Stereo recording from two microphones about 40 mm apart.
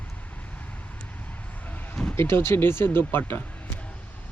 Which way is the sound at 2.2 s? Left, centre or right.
Left.